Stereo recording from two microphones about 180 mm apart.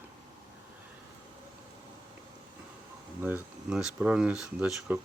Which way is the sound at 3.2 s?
5° right (ahead or behind).